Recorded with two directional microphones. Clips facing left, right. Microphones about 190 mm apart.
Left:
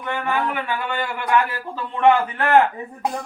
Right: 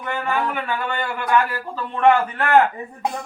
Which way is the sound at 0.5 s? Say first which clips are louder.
Even; 15° left (ahead or behind).